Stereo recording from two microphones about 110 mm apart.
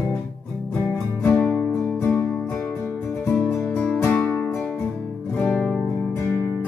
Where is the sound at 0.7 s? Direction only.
15° left (ahead or behind).